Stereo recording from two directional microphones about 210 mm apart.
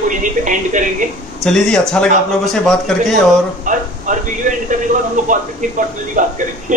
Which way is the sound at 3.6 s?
40° right (ahead or behind).